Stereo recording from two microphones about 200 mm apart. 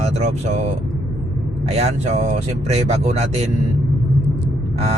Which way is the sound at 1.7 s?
30° right (ahead or behind).